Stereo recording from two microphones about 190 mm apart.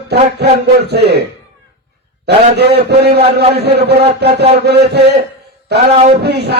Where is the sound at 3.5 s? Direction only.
60° right (ahead or behind).